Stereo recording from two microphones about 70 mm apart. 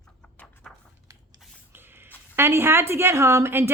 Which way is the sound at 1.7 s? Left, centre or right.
Right.